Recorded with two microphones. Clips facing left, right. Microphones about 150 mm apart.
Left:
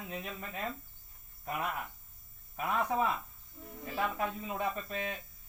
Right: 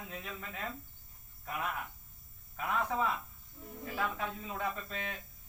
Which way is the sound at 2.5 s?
20° left (ahead or behind).